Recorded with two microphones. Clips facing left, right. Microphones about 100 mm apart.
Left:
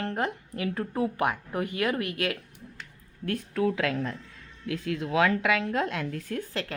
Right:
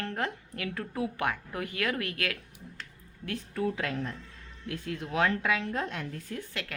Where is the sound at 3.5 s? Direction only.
90° left.